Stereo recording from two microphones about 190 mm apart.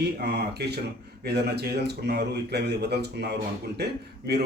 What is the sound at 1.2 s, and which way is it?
Speech, 55° right (ahead or behind).